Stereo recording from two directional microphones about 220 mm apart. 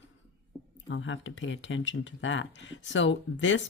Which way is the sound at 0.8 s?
60° left (ahead or behind).